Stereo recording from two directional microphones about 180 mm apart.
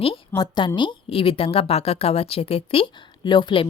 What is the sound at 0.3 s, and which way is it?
A woman's voice, 25° left (ahead or behind).